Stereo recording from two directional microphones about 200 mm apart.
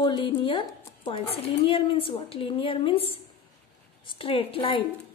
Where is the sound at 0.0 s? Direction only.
25° left (ahead or behind).